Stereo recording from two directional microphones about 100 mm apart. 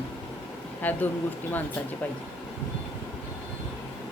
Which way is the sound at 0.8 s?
15° left (ahead or behind).